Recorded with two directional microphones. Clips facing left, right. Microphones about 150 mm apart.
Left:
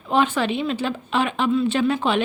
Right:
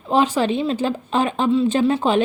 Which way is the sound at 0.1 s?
35° right (ahead or behind).